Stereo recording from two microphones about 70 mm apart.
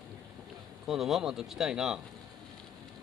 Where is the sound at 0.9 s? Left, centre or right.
Centre.